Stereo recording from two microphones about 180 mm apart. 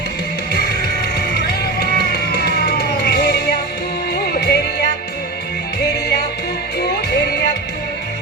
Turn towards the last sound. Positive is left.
turn(degrees=65)  # may be behind; listen again after turning